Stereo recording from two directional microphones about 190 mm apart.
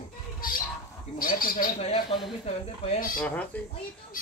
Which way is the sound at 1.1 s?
50° left (ahead or behind).